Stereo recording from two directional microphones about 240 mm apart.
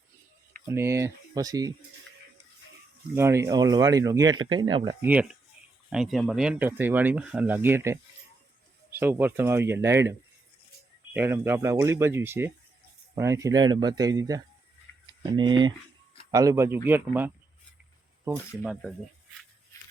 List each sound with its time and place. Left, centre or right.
0.7 s speech: centre
3.2 s speech: centre